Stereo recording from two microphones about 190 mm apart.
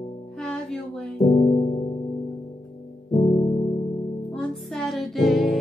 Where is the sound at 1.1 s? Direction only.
35° left (ahead or behind).